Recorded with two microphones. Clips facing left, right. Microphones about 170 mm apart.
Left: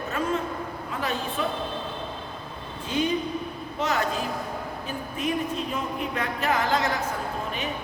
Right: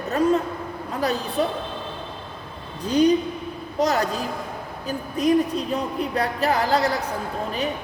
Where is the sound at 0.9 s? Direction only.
40° right (ahead or behind).